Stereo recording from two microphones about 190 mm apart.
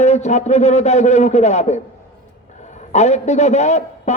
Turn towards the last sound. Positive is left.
turn(degrees=35)  # may be behind; listen again after turning